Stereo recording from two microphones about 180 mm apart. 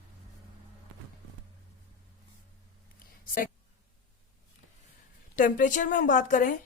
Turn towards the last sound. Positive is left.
turn(degrees=45)  # may be behind; listen again after turning